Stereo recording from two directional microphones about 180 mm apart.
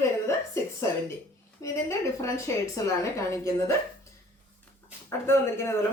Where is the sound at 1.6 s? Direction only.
15° left (ahead or behind).